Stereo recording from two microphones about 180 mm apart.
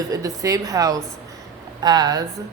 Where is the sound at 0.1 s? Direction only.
20° right (ahead or behind).